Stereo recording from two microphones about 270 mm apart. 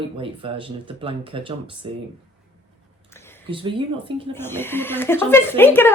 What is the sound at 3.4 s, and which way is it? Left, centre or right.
Speech, centre.